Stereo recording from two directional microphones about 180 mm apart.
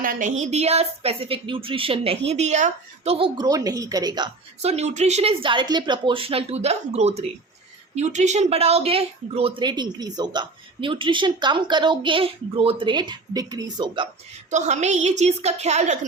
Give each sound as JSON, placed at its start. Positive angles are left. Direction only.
{"t": 0.0, "sound": "a woman's voice", "side_deg": -50}
{"t": 4.6, "sound": "a woman's voice", "side_deg": -40}
{"t": 14.5, "sound": "a woman's voice", "side_deg": -40}